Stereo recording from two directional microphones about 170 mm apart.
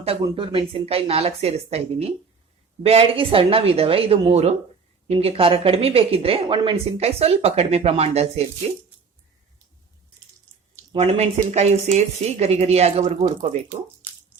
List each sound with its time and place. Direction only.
0.0 s speech: 30° right (ahead or behind)
10.9 s speech: 40° right (ahead or behind)